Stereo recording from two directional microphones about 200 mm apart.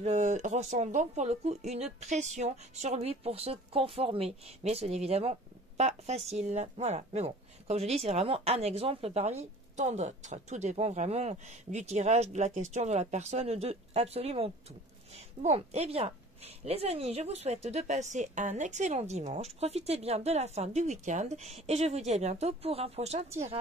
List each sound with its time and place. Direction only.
0.0 s a woman's voice: 35° right (ahead or behind)